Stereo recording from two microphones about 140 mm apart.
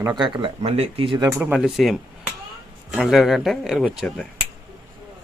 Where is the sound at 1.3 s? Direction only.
10° right (ahead or behind).